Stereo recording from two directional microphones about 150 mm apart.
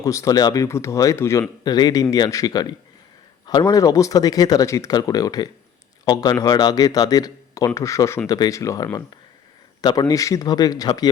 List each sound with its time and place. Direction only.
0.0 s speech: 20° left (ahead or behind)